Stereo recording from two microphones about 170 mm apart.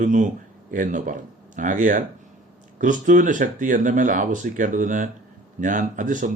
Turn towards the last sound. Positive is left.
turn(degrees=-50)  # may be behind; listen again after turning